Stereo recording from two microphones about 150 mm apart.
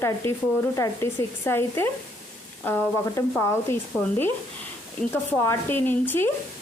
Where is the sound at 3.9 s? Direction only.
Centre (ahead or behind).